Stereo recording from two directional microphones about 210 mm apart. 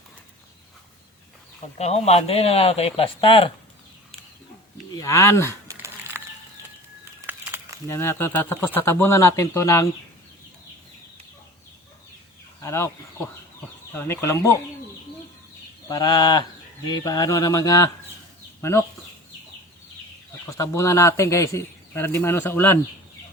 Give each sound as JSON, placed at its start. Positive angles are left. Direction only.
{"t": 1.8, "sound": "speech", "side_deg": 30}
{"t": 4.9, "sound": "speech", "side_deg": 15}
{"t": 5.6, "sound": "a sound", "side_deg": -15}
{"t": 7.3, "sound": "a sound", "side_deg": -10}
{"t": 7.9, "sound": "speech", "side_deg": 10}
{"t": 12.6, "sound": "speech", "side_deg": 10}
{"t": 15.9, "sound": "speech", "side_deg": 20}
{"t": 20.5, "sound": "speech", "side_deg": 15}